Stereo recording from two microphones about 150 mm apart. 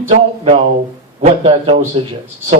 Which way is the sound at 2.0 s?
40° right (ahead or behind).